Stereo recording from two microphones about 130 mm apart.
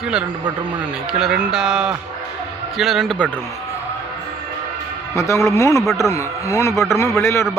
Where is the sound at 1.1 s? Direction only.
5° right (ahead or behind).